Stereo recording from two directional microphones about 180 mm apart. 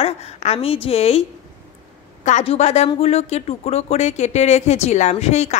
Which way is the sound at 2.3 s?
40° left (ahead or behind).